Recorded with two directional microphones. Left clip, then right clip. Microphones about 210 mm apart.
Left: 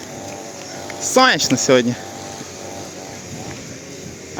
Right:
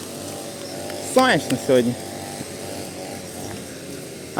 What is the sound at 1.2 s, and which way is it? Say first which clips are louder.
Speech: left 4 dB; 15° left (ahead or behind).